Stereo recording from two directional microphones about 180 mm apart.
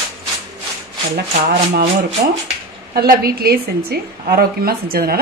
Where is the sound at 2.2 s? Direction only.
55° right (ahead or behind).